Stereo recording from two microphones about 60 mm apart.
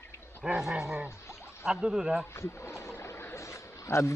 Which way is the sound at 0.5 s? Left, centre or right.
Centre.